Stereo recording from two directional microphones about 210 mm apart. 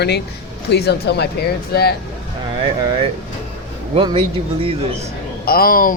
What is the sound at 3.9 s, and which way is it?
Speech, 25° right (ahead or behind).